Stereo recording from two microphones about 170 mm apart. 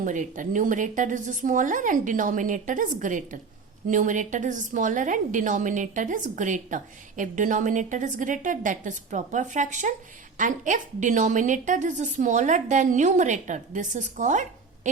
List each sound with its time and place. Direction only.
0.0 s a woman's voice: 50° right (ahead or behind)